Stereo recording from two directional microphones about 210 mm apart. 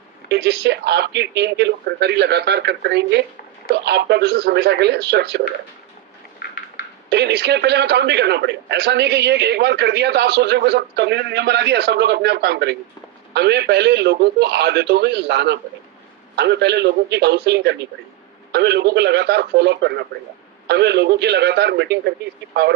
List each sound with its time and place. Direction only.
0.3 s a man's voice: 55° right (ahead or behind)
7.1 s a man's voice: 55° right (ahead or behind)